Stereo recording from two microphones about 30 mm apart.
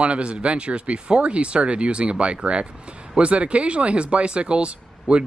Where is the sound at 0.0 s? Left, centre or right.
Right.